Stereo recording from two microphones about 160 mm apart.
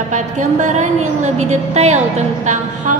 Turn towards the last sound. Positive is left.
turn(degrees=-50)  # may be behind; listen again after turning